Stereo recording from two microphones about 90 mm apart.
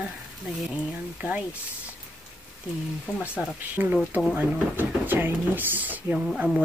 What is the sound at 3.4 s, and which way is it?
Speech, 10° right (ahead or behind).